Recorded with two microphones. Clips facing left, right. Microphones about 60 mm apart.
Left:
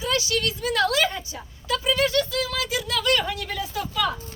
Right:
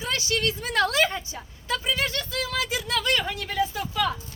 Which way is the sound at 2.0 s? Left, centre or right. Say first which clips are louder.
Left 6 dB; right.